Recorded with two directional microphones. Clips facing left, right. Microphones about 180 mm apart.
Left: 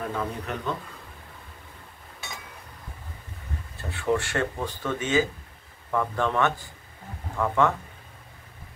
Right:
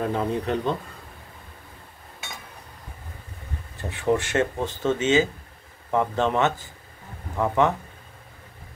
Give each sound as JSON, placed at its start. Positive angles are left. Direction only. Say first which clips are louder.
{"t": 0.0, "sound": "speech", "louder": "right 6 dB", "side_deg": -30}
{"t": 3.7, "sound": "speech", "louder": "right 3 dB", "side_deg": -20}